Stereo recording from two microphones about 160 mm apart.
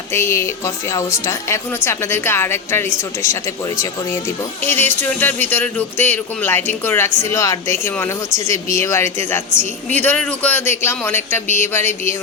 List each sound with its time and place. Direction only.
0.1 s speech: 15° left (ahead or behind)
4.6 s speech: 15° left (ahead or behind)